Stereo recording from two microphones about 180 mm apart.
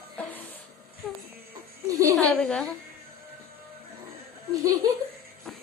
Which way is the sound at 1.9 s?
20° right (ahead or behind).